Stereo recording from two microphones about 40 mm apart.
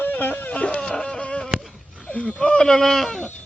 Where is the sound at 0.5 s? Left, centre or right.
Left.